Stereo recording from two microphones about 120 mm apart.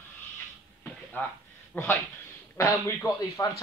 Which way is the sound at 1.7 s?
15° left (ahead or behind).